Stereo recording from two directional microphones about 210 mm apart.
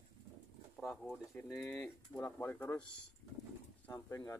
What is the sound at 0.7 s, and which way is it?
Speech, centre (ahead or behind).